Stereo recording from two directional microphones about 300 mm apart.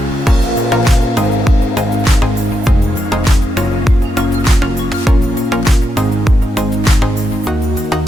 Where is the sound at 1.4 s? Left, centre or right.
Centre.